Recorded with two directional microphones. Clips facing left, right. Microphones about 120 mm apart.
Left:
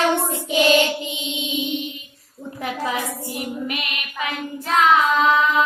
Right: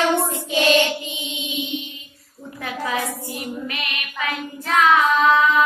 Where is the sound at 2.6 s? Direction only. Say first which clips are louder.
Left 1 dB; 20° left (ahead or behind).